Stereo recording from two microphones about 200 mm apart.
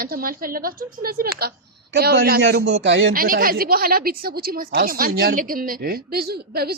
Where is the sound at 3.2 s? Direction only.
45° right (ahead or behind).